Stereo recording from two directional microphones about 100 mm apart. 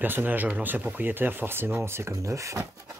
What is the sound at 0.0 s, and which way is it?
Speech, 20° right (ahead or behind).